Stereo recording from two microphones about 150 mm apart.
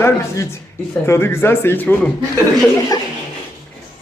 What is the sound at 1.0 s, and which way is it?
A man's voice, 15° left (ahead or behind).